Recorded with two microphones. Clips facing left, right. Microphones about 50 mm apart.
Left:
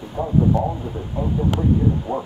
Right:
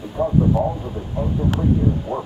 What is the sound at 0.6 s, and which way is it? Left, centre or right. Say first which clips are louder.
Speech: right 1 dB; centre.